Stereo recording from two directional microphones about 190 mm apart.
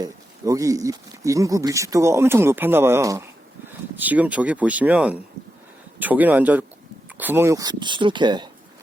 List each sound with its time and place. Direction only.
0.0 s speech: 15° right (ahead or behind)